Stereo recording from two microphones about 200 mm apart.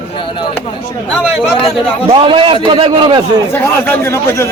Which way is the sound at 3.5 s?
10° left (ahead or behind).